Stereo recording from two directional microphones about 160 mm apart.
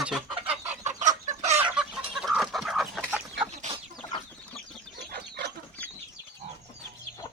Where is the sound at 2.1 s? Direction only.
5° right (ahead or behind).